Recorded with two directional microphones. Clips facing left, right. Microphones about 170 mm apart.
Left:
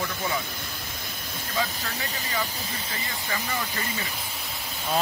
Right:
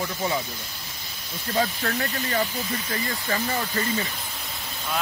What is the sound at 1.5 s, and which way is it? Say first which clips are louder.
Speech: right 6 dB; 45° right (ahead or behind).